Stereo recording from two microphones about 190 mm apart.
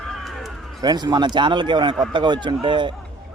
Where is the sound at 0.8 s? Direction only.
20° right (ahead or behind).